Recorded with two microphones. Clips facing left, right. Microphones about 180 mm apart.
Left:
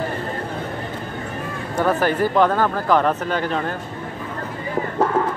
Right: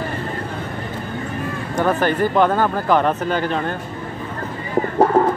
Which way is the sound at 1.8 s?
5° left (ahead or behind).